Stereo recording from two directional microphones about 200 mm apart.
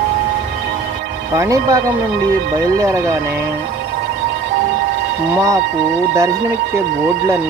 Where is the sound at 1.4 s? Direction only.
15° right (ahead or behind).